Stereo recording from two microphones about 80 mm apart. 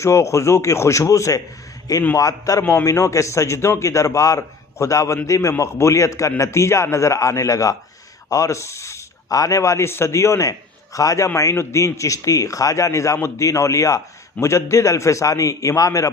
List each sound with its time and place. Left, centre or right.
0.0 s a man's voice: left